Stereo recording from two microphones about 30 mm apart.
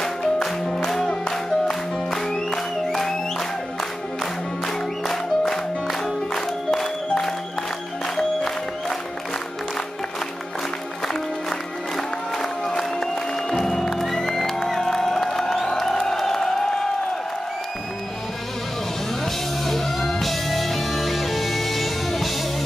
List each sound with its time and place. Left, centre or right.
0.0 s music: centre
5.0 s music: centre
12.4 s music: centre
14.7 s crowd: centre
16.6 s a sound: left
19.6 s music: centre